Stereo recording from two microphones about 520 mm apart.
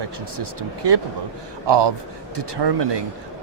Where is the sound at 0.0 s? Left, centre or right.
Right.